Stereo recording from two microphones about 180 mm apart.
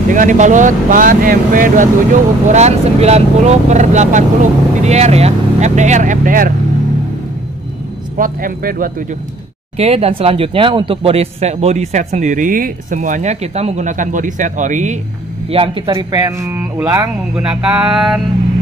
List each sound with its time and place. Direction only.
0.1 s speech: 45° right (ahead or behind)
2.5 s speech: 40° right (ahead or behind)
8.2 s speech: 50° right (ahead or behind)
9.8 s speech: 35° right (ahead or behind)
15.5 s speech: 30° right (ahead or behind)
15.9 s speech: 20° right (ahead or behind)
17.4 s a sound: 5° right (ahead or behind)